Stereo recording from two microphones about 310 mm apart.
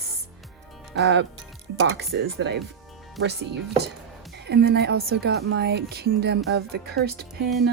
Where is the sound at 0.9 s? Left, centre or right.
Right.